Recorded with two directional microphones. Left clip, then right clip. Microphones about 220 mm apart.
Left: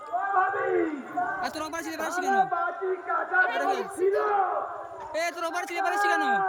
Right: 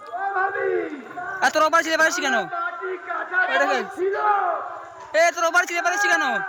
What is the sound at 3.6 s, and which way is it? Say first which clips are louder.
Speech: right 6 dB; 10° right (ahead or behind).